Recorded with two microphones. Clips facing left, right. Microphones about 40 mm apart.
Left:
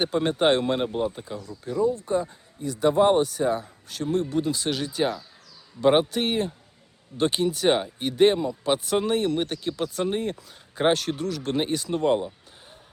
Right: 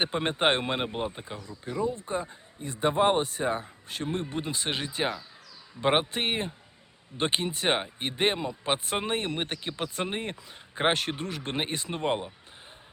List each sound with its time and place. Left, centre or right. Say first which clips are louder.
0.0 s speech: left 4 dB; right